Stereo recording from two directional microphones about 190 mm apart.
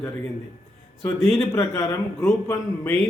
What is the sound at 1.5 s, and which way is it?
A man's voice, 15° left (ahead or behind).